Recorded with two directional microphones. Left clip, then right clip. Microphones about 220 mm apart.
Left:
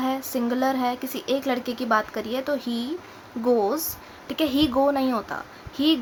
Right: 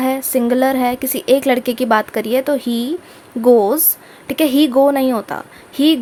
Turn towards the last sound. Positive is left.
turn(degrees=-30)  # may be behind; listen again after turning